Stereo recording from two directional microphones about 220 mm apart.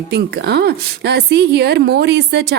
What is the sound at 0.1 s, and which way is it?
A woman's voice, 45° right (ahead or behind).